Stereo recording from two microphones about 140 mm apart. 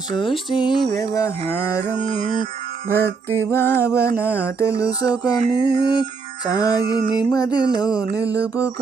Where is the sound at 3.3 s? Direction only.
20° left (ahead or behind).